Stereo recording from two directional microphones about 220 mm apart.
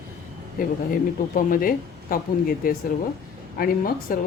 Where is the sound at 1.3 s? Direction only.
40° left (ahead or behind).